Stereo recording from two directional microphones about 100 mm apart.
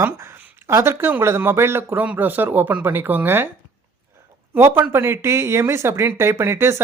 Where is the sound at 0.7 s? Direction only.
25° right (ahead or behind).